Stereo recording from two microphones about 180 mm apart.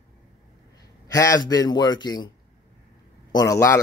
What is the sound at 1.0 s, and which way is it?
A man's voice, 20° left (ahead or behind).